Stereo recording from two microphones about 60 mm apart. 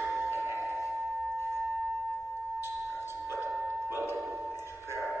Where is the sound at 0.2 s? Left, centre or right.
Right.